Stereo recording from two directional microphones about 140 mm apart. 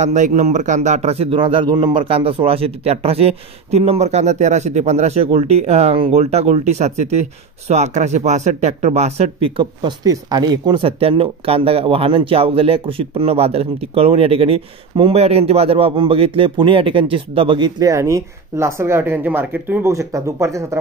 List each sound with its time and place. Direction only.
0.0 s a man's voice: 60° right (ahead or behind); by 20.6 s 20° right (ahead or behind)